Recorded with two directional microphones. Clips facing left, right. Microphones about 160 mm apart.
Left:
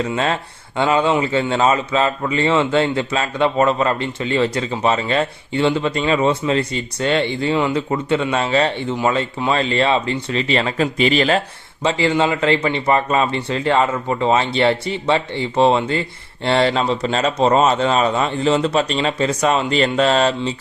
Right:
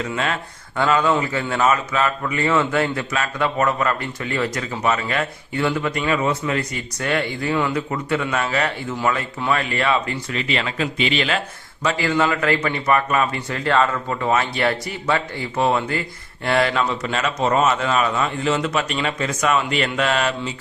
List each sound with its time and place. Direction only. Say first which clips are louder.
0.0 s a man's voice: left 4 dB; 30° left (ahead or behind)
11.9 s a man's voice: left 3 dB; 25° left (ahead or behind)